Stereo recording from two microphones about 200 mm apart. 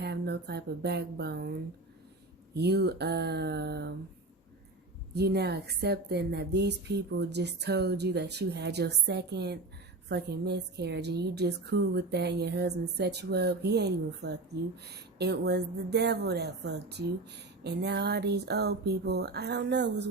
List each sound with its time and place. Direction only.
0.0 s speech: 55° right (ahead or behind)
2.6 s a woman's voice: 55° right (ahead or behind)
5.1 s a woman's voice: 55° right (ahead or behind)